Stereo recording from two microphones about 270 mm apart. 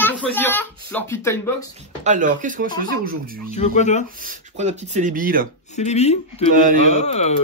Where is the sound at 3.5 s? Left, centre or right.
Left.